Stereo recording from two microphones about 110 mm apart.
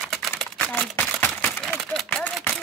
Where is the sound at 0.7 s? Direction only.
15° left (ahead or behind).